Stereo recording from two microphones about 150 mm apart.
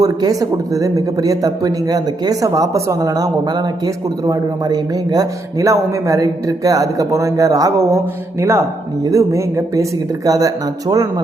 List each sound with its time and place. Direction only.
0.0 s speech: 25° right (ahead or behind)